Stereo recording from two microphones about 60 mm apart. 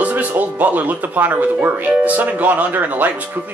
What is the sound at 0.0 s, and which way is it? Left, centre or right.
Speech, right.